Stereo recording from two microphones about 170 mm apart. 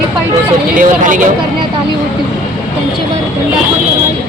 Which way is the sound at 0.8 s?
50° right (ahead or behind).